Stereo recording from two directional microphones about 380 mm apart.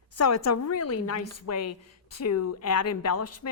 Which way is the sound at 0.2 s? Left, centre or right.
Left.